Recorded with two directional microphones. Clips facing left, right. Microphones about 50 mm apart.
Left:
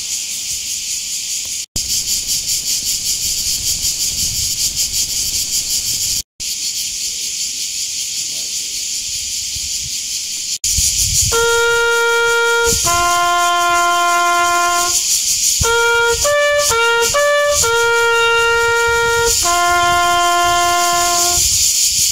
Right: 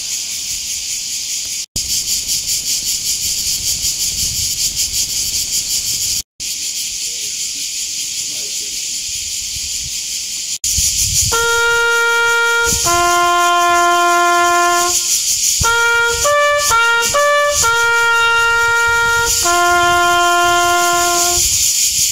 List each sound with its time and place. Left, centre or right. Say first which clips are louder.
11.2 s shofar: even; centre
15.7 s music: even; centre
16.7 s trumpet: right 1 dB; centre
17.6 s shofar: right 2 dB; centre
21.1 s music: right 1 dB; right